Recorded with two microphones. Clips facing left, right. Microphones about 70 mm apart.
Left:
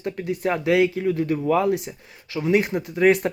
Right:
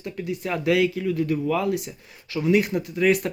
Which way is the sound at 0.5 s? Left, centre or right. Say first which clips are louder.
Left 1 dB; left.